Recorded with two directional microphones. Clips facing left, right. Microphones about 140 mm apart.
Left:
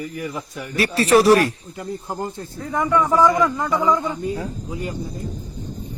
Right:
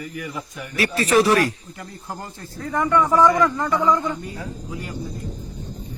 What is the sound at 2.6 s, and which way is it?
Speech, 5° left (ahead or behind).